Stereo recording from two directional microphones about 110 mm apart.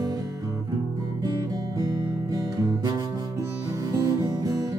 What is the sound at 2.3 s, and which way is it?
Guitar, 35° right (ahead or behind).